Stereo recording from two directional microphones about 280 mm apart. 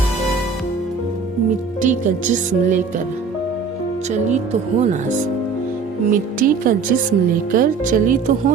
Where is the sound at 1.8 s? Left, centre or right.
Right.